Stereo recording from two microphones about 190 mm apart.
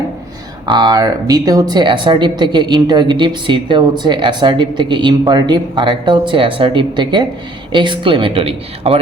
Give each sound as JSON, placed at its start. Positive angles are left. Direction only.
{"t": 0.6, "sound": "speech", "side_deg": -25}